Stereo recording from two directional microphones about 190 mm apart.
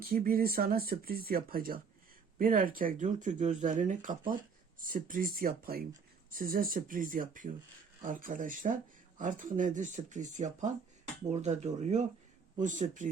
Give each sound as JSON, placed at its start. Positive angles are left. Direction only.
{"t": 0.0, "sound": "speech", "side_deg": -50}